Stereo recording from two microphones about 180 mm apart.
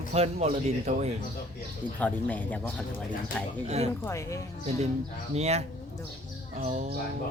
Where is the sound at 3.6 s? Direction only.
35° right (ahead or behind).